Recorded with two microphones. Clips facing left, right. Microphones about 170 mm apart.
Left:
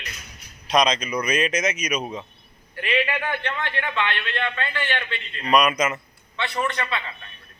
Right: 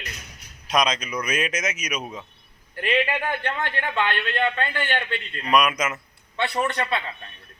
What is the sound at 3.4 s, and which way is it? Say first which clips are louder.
A man's voice: right 1 dB; 40° right (ahead or behind).